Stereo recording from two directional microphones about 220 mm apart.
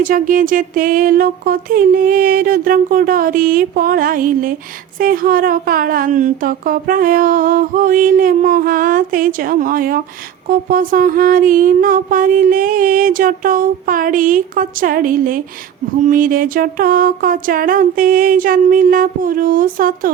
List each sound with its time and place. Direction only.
0.0 s speech: 40° right (ahead or behind)